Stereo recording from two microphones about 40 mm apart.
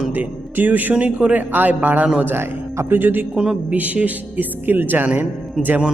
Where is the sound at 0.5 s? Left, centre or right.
Right.